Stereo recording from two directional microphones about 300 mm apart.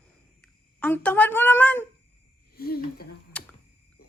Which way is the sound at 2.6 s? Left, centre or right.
Left.